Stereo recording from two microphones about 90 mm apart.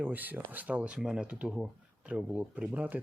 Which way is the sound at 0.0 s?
20° right (ahead or behind).